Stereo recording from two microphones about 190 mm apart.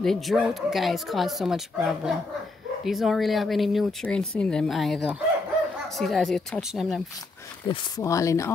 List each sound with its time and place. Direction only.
0.0 s speech: centre (ahead or behind)
7.6 s speech: 20° left (ahead or behind)